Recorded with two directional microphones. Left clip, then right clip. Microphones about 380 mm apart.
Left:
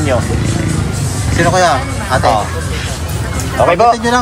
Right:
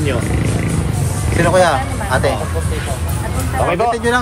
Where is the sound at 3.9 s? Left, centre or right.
Centre.